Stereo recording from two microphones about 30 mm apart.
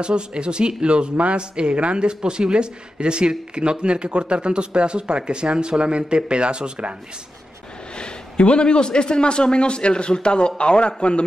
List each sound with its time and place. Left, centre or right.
0.0 s speech: right
7.9 s a man's voice: left